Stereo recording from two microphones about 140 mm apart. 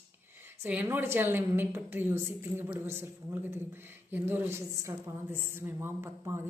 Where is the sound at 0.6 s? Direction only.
15° right (ahead or behind).